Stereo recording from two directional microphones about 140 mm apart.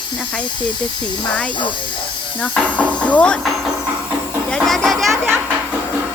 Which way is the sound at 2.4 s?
10° left (ahead or behind).